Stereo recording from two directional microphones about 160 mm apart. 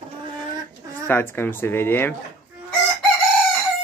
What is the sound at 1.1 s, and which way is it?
Speech, 15° left (ahead or behind).